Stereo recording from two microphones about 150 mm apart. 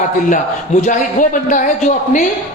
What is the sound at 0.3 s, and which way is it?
A man's voice, 55° left (ahead or behind).